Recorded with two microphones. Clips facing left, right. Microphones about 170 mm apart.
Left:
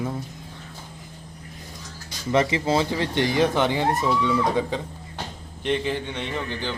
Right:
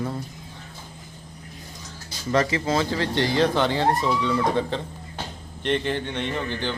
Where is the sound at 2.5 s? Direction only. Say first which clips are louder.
Left 1 dB; 20° left (ahead or behind).